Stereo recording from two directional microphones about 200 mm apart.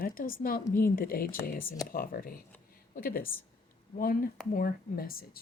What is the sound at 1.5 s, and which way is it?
Speech, 15° left (ahead or behind).